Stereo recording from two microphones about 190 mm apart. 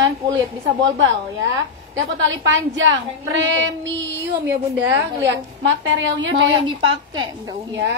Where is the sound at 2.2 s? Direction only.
80° right.